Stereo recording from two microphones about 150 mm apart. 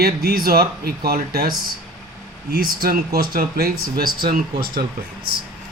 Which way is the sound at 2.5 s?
85° right.